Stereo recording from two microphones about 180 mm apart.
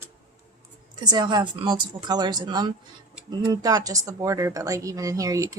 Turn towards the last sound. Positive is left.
turn(degrees=-20)  # may be behind; listen again after turning